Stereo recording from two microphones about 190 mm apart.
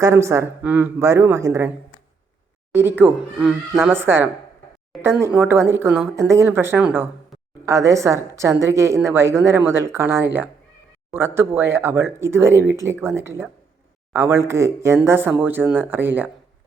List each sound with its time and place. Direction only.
0.0 s speech: 15° right (ahead or behind)
3.0 s speech: centre (ahead or behind)
3.9 s speech: 10° right (ahead or behind)